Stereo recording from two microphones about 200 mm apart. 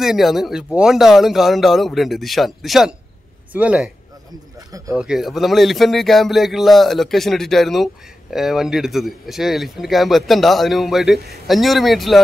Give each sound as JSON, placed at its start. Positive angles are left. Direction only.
{"t": 0.0, "sound": "speech", "side_deg": 0}
{"t": 4.6, "sound": "speech", "side_deg": -15}
{"t": 4.9, "sound": "speech", "side_deg": -5}